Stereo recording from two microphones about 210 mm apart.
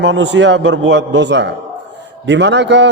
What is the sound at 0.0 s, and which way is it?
A man's voice, 60° right (ahead or behind).